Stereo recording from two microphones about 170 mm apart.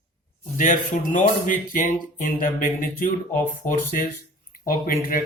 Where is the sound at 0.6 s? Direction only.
50° left (ahead or behind).